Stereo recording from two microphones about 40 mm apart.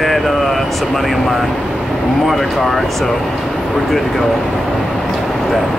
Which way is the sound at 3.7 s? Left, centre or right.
Centre.